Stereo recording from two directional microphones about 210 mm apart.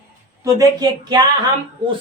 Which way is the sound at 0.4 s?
20° right (ahead or behind).